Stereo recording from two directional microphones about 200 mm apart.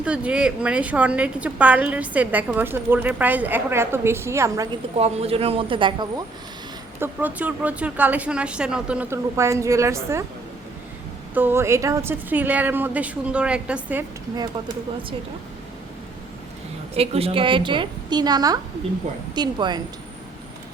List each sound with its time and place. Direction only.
0.0 s a woman's voice: 5° right (ahead or behind)
4.9 s a woman's voice: 30° right (ahead or behind)
7.0 s a woman's voice: 10° right (ahead or behind)
11.3 s a woman's voice: 10° right (ahead or behind)
16.9 s a woman's voice: 30° right (ahead or behind)